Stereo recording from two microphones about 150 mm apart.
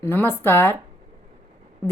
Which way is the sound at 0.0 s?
15° left (ahead or behind).